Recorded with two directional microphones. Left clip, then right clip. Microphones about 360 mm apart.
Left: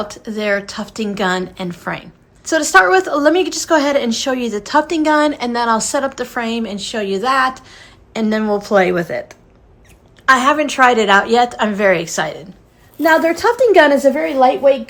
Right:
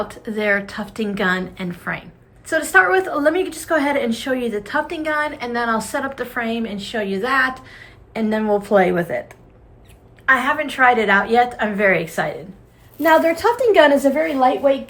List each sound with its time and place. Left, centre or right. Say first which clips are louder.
0.0 s a woman's voice: left 1 dB; centre
13.0 s a woman's voice: left 2 dB; left